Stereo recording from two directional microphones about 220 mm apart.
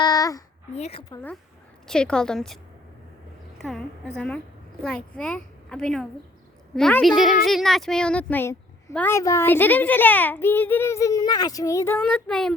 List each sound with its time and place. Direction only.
0.0 s a sound: 15° left (ahead or behind)
0.7 s a woman's voice: 30° left (ahead or behind)
1.1 s a woman's voice: 10° left (ahead or behind)
3.6 s a woman's voice: centre (ahead or behind)